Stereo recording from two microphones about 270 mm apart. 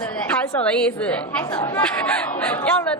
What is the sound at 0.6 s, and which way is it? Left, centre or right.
A woman's voice, centre.